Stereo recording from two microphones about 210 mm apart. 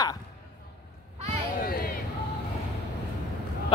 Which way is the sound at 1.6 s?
45° left (ahead or behind).